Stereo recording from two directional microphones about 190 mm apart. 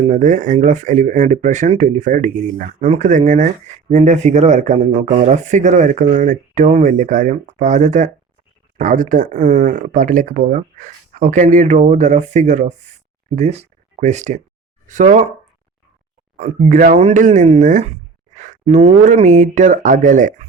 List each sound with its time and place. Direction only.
0.1 s speech: 40° right (ahead or behind)
16.4 s speech: 40° right (ahead or behind)